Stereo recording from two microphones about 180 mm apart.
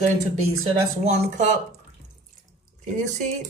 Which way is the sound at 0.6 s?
40° right (ahead or behind).